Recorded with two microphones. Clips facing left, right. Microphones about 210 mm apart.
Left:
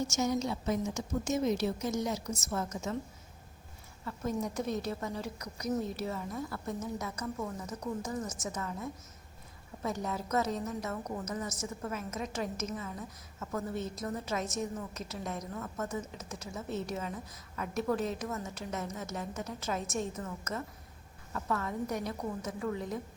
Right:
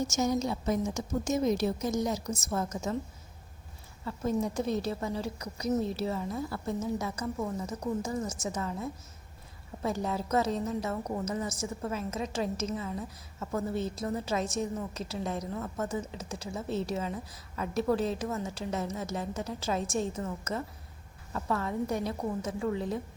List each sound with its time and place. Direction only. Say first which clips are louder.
0.2 s a woman's voice: right 3 dB; 40° right (ahead or behind)
4.0 s a woman's voice: right 4 dB; 30° right (ahead or behind)
8.4 s a woman's voice: right 4 dB; 30° right (ahead or behind)